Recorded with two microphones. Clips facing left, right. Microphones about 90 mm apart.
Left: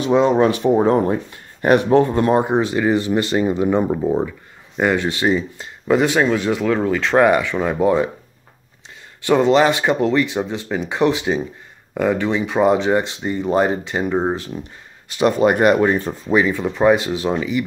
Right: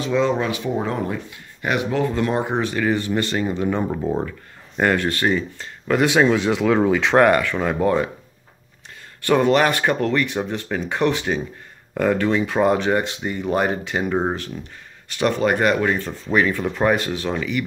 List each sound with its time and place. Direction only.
0.0 s speech: 25° left (ahead or behind)
0.4 s speech: 40° left (ahead or behind); by 8.1 s 10° left (ahead or behind)
9.2 s speech: 15° left (ahead or behind)
14.1 s speech: centre (ahead or behind)
15.4 s speech: 25° left (ahead or behind)